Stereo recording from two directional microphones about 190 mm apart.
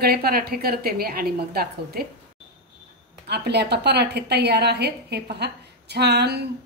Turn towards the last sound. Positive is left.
turn(degrees=-60)  # may be behind; listen again after turning